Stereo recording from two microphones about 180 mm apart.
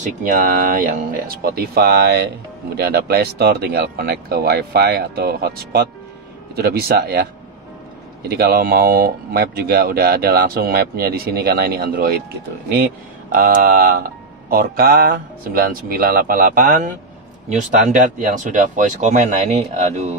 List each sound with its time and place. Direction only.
0.0 s speech: 45° right (ahead or behind)
8.3 s speech: 55° right (ahead or behind)
13.3 s speech: 55° right (ahead or behind); by 20.2 s 35° right (ahead or behind)